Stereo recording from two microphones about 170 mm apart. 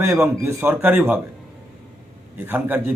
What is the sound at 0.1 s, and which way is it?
A man's voice, 10° right (ahead or behind).